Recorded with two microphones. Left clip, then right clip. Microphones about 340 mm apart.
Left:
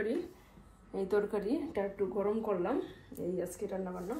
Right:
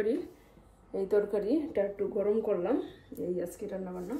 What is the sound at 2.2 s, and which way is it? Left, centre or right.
Speech, left.